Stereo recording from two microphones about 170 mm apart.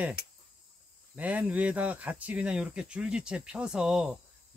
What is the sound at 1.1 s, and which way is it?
Speech, 10° right (ahead or behind).